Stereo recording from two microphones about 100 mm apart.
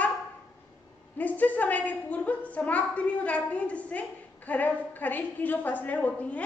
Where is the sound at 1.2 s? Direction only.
15° left (ahead or behind).